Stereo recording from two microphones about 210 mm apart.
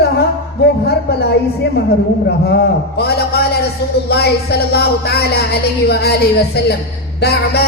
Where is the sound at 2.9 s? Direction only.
50° left (ahead or behind).